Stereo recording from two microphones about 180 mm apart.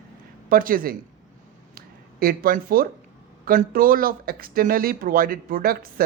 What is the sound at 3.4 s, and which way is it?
Speech, 50° right (ahead or behind).